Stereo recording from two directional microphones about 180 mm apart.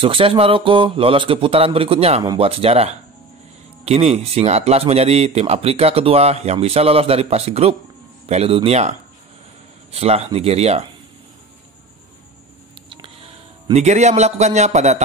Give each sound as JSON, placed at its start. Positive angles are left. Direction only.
{"t": 0.0, "sound": "speech", "side_deg": -30}
{"t": 9.9, "sound": "speech", "side_deg": -35}
{"t": 13.7, "sound": "speech", "side_deg": -40}